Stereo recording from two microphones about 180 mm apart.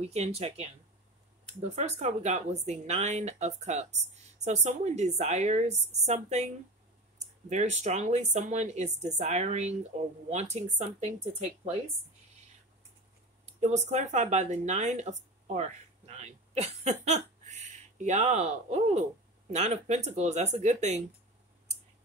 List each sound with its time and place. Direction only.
0.1 s speech: 35° right (ahead or behind)
13.5 s speech: 40° right (ahead or behind)